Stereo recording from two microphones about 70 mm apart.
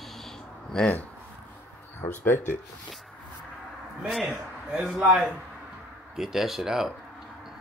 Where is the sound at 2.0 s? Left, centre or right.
Left.